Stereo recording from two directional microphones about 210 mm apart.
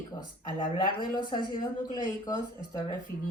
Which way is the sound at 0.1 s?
20° left (ahead or behind).